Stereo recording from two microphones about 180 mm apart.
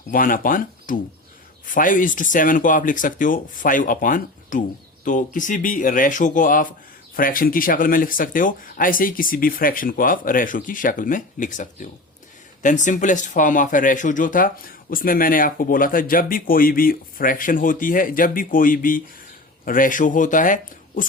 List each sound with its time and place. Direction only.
0.1 s speech: 50° left (ahead or behind)